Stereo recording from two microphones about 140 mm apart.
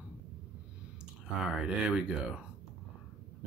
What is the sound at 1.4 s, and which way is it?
Speech, 5° right (ahead or behind).